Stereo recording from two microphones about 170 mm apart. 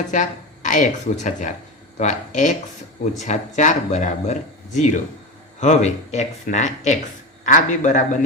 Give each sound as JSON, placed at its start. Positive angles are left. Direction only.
{"t": 0.1, "sound": "speech", "side_deg": 45}